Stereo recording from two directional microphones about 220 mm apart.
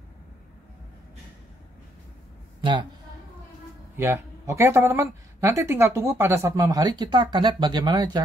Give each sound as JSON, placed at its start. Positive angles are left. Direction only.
{"t": 2.6, "sound": "a man's voice", "side_deg": -20}
{"t": 3.9, "sound": "speech", "side_deg": -10}